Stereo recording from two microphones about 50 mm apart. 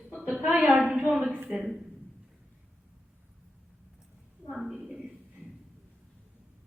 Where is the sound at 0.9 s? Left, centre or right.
Right.